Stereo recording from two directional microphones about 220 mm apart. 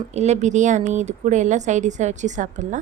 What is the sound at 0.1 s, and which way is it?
Speech, 30° right (ahead or behind).